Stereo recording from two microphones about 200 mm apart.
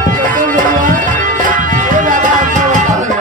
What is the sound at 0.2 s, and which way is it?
Music, 40° right (ahead or behind).